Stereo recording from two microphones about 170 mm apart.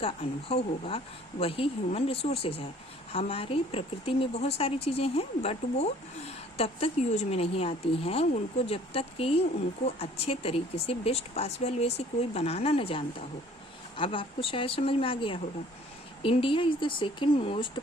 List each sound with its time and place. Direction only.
0.0 s a woman's voice: 35° left (ahead or behind)